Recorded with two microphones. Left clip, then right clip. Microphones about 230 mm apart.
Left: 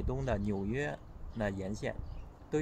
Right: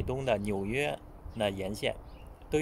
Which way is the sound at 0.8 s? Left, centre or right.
Centre.